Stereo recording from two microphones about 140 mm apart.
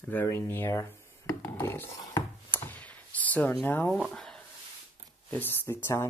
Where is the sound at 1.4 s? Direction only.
15° left (ahead or behind).